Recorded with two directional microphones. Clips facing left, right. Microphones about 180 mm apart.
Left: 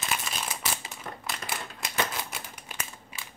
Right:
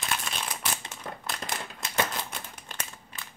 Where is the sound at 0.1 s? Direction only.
5° left (ahead or behind).